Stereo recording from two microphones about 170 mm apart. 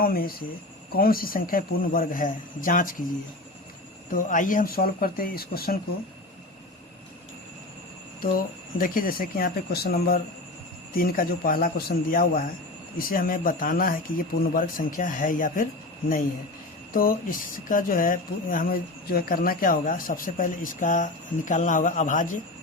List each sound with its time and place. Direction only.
0.0 s a man's voice: 60° left (ahead or behind)
4.1 s a man's voice: 50° left (ahead or behind)
8.2 s a man's voice: 55° left (ahead or behind)
16.9 s speech: 55° left (ahead or behind)